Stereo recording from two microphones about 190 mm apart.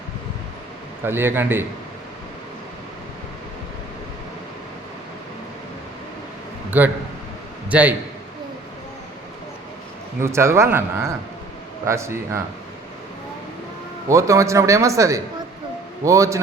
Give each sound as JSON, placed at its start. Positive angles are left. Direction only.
{"t": 1.0, "sound": "speech", "side_deg": -10}
{"t": 6.7, "sound": "a man's voice", "side_deg": -10}
{"t": 10.2, "sound": "speech", "side_deg": -15}
{"t": 14.1, "sound": "speech", "side_deg": -15}